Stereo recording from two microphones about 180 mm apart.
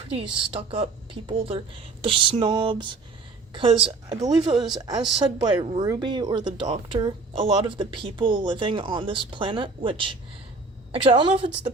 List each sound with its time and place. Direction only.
0.1 s speech: 30° right (ahead or behind)